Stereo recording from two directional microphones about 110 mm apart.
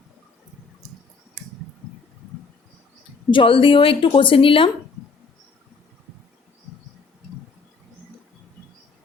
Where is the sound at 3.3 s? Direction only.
55° left (ahead or behind).